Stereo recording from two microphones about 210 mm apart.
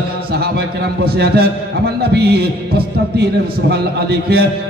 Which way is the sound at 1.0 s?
50° right (ahead or behind).